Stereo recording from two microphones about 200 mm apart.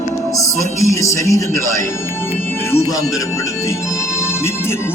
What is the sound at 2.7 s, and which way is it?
Speech, 15° left (ahead or behind).